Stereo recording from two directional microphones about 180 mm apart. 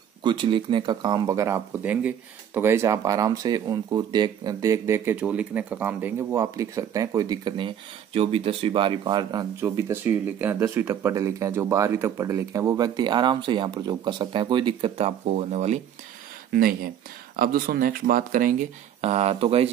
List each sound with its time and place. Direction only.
0.2 s speech: 25° right (ahead or behind)
16.5 s speech: 55° right (ahead or behind); by 19.7 s 35° right (ahead or behind)